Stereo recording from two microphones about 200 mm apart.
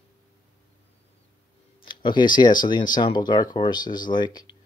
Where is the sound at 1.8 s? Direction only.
25° left (ahead or behind).